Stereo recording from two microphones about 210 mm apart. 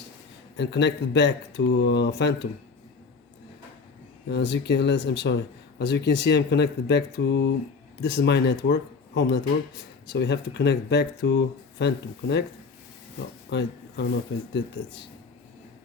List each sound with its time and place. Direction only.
0.5 s speech: 55° left (ahead or behind)
4.3 s speech: 55° left (ahead or behind)
13.5 s a sound: 55° left (ahead or behind)
14.5 s speech: 55° left (ahead or behind)